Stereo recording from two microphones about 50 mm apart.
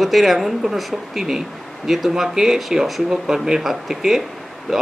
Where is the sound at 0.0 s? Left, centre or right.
Centre.